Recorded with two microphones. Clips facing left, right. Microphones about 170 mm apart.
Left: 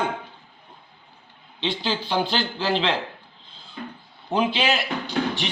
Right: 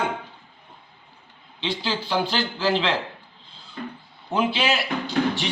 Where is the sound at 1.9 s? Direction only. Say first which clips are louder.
Even; 20° left (ahead or behind).